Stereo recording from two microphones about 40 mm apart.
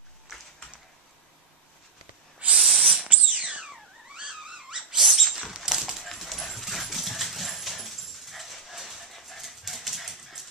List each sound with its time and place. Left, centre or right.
2.6 s owl: centre
3.0 s a sound: right
4.2 s dog: centre
4.9 s rodents: centre
5.6 s dog: centre